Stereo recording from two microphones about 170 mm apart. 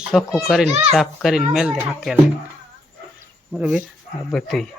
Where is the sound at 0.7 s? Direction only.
40° right (ahead or behind).